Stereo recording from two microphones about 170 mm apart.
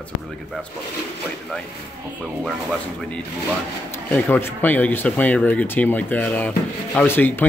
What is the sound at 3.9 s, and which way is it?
Speech, 10° left (ahead or behind).